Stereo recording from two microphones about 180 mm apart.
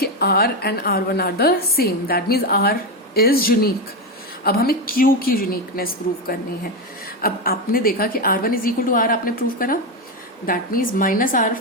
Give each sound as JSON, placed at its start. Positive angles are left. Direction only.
{"t": 0.0, "sound": "a woman's voice", "side_deg": 60}